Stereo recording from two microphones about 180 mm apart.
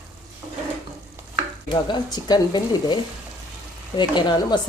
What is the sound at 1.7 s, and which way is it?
Speech, 25° left (ahead or behind).